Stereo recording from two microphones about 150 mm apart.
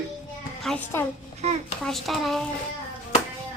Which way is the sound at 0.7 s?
5° left (ahead or behind).